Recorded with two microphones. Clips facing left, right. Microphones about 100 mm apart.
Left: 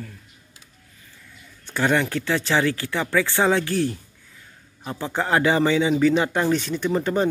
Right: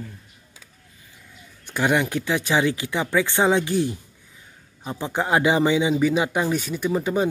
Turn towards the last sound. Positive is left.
turn(degrees=-10)  # may be behind; listen again after turning